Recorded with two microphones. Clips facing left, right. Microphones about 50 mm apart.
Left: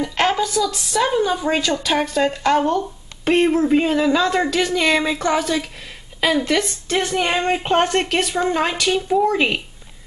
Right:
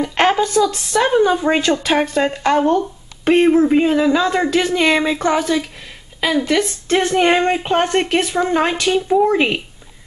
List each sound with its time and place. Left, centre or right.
0.0 s a sound: centre
0.6 s a woman's voice: right; by 6.7 s centre
6.9 s a woman's voice: right